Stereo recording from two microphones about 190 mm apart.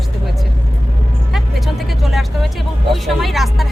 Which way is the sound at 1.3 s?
Centre (ahead or behind).